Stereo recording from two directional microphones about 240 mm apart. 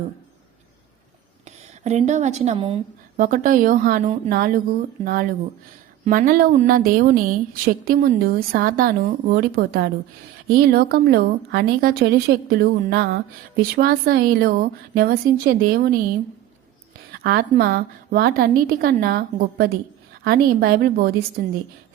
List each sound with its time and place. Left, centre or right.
1.5 s a woman's voice: right
17.1 s a woman's voice: right